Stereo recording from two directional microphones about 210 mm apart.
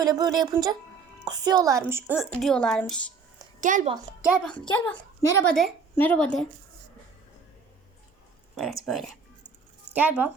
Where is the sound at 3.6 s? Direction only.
40° right (ahead or behind).